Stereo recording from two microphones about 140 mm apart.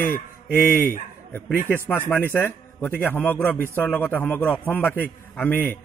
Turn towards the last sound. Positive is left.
turn(degrees=10)  # may be behind; listen again after turning